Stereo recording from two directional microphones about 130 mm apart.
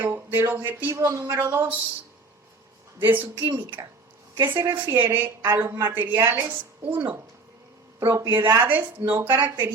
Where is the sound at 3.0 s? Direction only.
15° right (ahead or behind).